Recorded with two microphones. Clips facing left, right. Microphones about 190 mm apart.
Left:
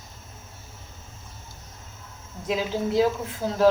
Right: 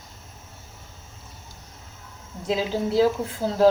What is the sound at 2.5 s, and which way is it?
Speech, 30° right (ahead or behind).